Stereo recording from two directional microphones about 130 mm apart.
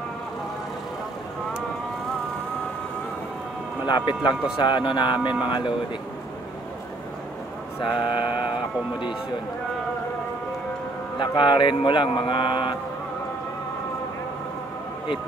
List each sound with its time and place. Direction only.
3.8 s speech: 35° left (ahead or behind)
7.8 s speech: 40° left (ahead or behind)
11.1 s speech: 35° left (ahead or behind)